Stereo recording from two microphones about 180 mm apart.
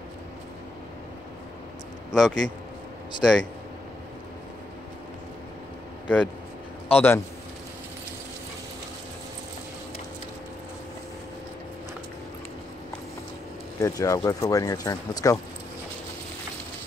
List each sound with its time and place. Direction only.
2.1 s a man's voice: 5° left (ahead or behind)
6.9 s a man's voice: 10° left (ahead or behind)
13.7 s speech: 20° left (ahead or behind)